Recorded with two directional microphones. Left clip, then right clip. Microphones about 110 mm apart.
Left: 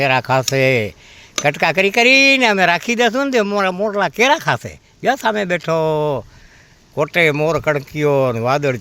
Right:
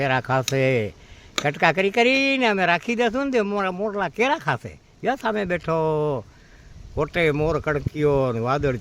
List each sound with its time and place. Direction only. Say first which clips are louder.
0.0 s speech: left 7 dB; 15° left (ahead or behind)